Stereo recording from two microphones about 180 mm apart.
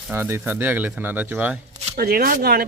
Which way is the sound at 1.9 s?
55° right (ahead or behind).